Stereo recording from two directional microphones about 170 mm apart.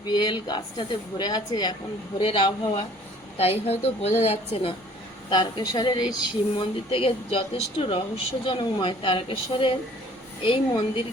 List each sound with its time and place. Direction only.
0.0 s a woman's voice: 25° left (ahead or behind)
5.3 s a woman's voice: 25° left (ahead or behind)